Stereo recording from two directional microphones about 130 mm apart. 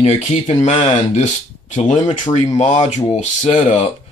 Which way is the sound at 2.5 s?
65° left (ahead or behind).